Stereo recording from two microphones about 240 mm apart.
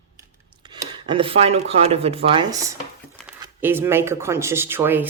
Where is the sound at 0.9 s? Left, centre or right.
Right.